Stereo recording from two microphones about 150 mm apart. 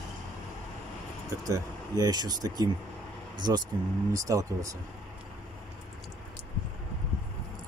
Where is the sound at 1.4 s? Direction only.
25° right (ahead or behind).